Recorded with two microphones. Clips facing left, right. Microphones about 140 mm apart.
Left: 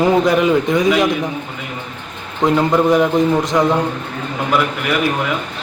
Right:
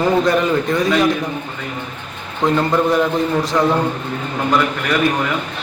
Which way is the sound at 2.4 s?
20° left (ahead or behind).